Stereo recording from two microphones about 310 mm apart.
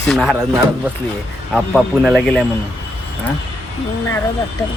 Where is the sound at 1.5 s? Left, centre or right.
Centre.